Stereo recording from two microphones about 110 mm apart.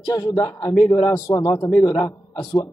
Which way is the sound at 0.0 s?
35° left (ahead or behind).